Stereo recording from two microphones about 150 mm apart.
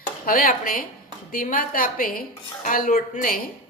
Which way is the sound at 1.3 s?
65° left (ahead or behind).